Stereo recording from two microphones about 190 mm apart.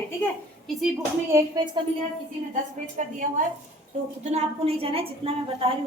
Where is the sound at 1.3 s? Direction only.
15° right (ahead or behind).